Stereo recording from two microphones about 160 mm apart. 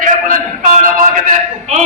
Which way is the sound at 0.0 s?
55° right (ahead or behind).